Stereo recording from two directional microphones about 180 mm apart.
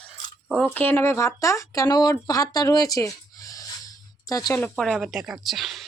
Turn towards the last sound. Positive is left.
turn(degrees=0)  # may be behind; listen again after turning